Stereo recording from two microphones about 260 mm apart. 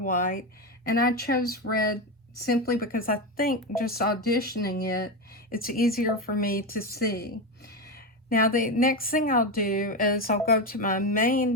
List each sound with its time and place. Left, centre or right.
0.0 s speech: left